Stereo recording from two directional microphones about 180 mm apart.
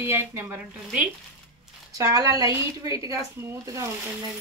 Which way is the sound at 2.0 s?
20° right (ahead or behind).